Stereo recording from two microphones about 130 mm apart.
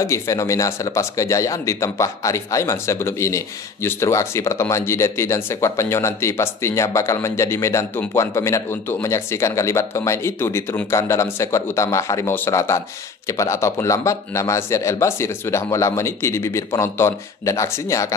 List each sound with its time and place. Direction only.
0.0 s speech: 25° left (ahead or behind)